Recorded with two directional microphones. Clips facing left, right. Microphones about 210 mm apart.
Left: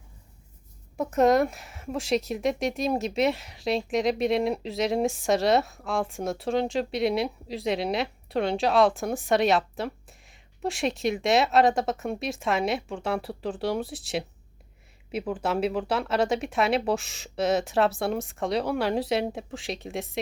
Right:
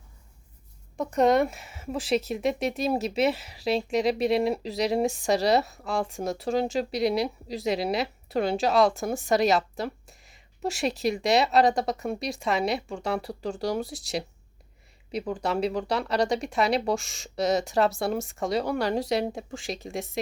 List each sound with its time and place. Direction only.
0.9 s speech: centre (ahead or behind)